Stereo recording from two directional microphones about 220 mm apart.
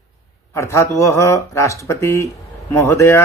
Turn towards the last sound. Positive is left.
turn(degrees=10)  # may be behind; listen again after turning